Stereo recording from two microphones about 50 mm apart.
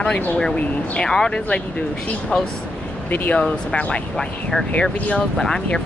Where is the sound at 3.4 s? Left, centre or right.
Centre.